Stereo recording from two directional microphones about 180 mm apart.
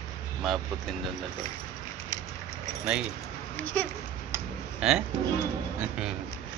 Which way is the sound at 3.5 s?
10° left (ahead or behind).